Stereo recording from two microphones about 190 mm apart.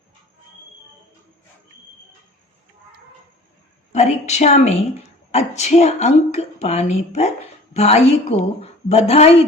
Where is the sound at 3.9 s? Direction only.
35° left (ahead or behind).